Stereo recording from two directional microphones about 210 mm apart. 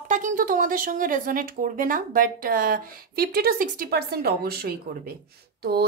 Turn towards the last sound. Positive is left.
turn(degrees=-50)  # may be behind; listen again after turning